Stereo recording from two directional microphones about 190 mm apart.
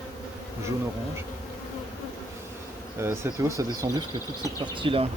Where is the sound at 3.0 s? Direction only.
15° right (ahead or behind).